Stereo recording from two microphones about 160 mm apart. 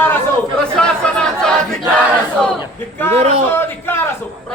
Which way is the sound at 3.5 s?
15° left (ahead or behind).